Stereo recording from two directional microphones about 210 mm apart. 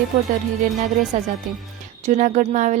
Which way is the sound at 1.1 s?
35° right (ahead or behind).